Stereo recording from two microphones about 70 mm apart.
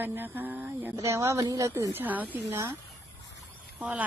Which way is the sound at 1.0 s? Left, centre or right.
Right.